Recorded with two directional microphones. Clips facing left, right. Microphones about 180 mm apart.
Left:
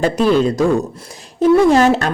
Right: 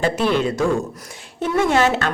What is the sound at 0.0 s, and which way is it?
A man's voice, 40° left (ahead or behind).